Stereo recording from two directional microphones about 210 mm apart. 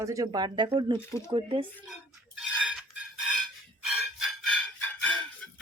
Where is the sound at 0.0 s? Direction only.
15° right (ahead or behind).